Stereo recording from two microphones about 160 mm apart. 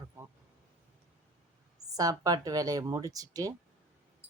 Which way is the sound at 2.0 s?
25° right (ahead or behind).